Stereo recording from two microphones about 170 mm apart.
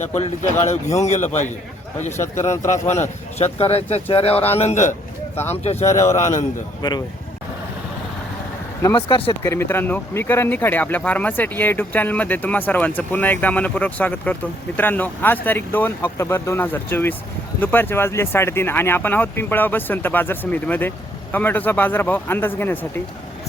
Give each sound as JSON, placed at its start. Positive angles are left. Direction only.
{"t": 0.0, "sound": "speech", "side_deg": 40}
{"t": 2.6, "sound": "speech", "side_deg": 45}
{"t": 6.0, "sound": "speech", "side_deg": 15}
{"t": 9.0, "sound": "speech", "side_deg": 30}
{"t": 9.4, "sound": "speech", "side_deg": 15}